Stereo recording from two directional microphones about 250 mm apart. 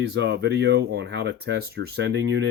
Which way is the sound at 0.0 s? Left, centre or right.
Right.